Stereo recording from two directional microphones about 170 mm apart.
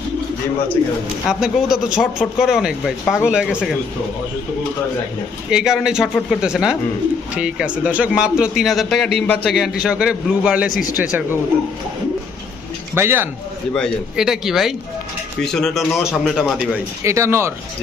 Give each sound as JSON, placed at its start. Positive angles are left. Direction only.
{"t": 1.3, "sound": "a man's voice", "side_deg": -5}
{"t": 5.5, "sound": "a man's voice", "side_deg": -5}
{"t": 10.8, "sound": "speech", "side_deg": 55}
{"t": 12.9, "sound": "speech", "side_deg": -15}
{"t": 13.7, "sound": "a man's voice", "side_deg": 0}
{"t": 17.0, "sound": "speech", "side_deg": -15}